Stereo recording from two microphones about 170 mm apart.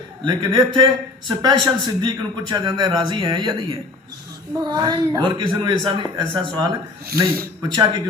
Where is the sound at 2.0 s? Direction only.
25° right (ahead or behind).